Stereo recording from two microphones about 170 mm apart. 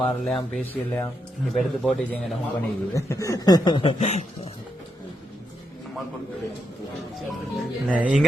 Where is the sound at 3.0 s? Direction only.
20° left (ahead or behind).